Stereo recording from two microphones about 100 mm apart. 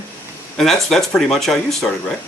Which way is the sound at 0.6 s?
5° left (ahead or behind).